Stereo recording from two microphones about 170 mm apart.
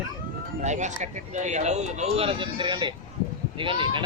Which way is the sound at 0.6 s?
45° right (ahead or behind).